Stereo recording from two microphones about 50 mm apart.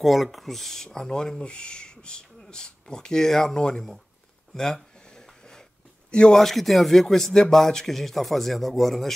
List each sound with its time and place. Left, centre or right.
0.0 s speech: centre
4.6 s a sound: centre
6.3 s speech: centre